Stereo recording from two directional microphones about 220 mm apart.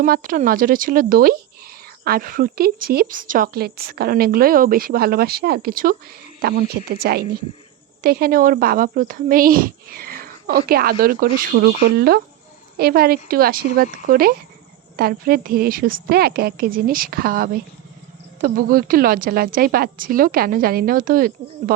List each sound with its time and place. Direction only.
0.0 s a woman's voice: 40° right (ahead or behind)